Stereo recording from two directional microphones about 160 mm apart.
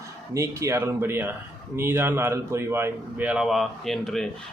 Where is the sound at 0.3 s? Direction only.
15° right (ahead or behind).